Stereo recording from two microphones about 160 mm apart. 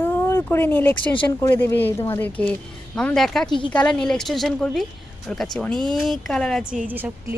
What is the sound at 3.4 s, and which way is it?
Speech, 30° left (ahead or behind).